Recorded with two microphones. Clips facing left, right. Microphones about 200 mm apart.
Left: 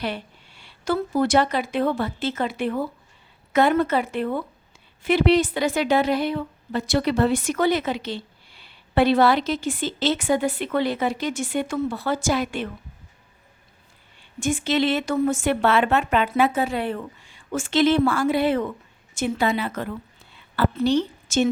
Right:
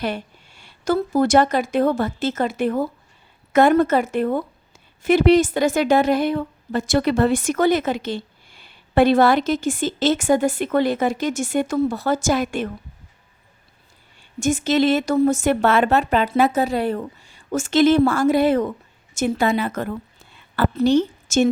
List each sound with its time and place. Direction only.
0.0 s a woman's voice: 45° right (ahead or behind)
14.2 s a woman's voice: 45° right (ahead or behind)